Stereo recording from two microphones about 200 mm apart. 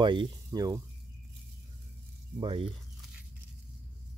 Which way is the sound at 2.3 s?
25° right (ahead or behind).